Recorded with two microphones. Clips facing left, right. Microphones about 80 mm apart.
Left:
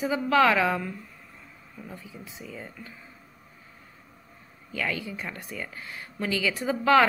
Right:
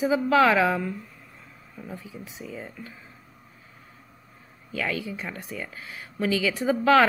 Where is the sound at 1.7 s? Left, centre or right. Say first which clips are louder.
Right 3 dB; centre.